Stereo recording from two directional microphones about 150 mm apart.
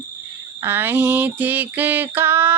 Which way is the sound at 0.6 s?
15° right (ahead or behind).